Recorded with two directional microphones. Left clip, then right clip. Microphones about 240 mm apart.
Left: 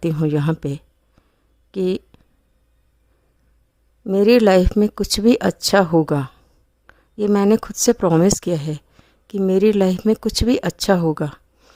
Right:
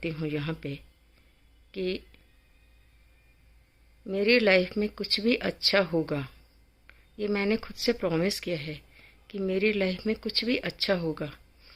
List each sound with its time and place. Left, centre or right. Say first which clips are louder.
0.0 s speech: left 11 dB; left
4.0 s speech: left 10 dB; left